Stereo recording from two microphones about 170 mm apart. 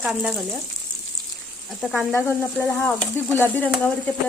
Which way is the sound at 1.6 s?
5° left (ahead or behind).